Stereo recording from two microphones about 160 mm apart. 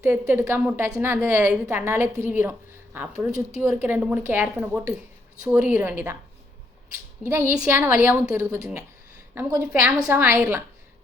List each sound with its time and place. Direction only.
0.0 s a woman's voice: 15° right (ahead or behind)
7.3 s a woman's voice: 15° right (ahead or behind)